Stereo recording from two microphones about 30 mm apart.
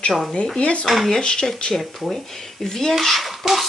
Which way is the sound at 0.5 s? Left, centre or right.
Left.